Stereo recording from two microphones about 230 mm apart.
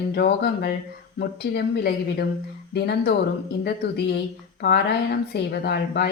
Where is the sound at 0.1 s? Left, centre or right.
Left.